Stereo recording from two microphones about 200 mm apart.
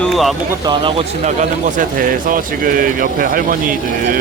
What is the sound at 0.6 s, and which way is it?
Speech, 20° right (ahead or behind).